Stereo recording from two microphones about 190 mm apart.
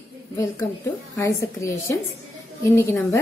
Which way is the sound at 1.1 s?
15° left (ahead or behind).